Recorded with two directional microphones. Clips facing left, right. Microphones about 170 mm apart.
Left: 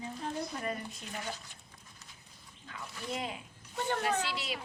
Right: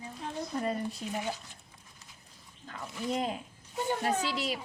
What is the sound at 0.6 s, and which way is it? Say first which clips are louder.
Speech: right 5 dB; 35° right (ahead or behind).